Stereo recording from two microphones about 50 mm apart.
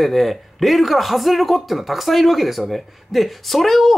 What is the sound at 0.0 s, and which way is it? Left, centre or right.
Speech, centre.